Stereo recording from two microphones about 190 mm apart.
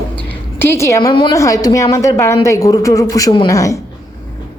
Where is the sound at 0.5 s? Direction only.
10° left (ahead or behind).